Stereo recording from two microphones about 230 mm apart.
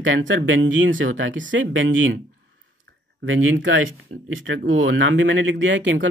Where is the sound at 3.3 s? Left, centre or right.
Right.